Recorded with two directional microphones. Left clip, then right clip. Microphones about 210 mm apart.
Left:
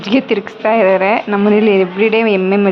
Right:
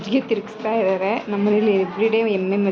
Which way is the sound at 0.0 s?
20° left (ahead or behind).